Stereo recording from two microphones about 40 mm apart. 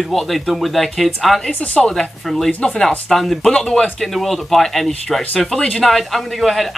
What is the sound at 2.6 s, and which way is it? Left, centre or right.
Speech, left.